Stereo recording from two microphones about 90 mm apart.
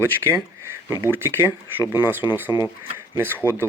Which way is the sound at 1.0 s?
25° right (ahead or behind).